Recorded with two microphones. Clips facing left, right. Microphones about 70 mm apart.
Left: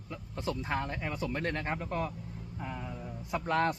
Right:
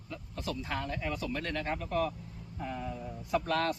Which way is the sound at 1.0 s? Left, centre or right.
Left.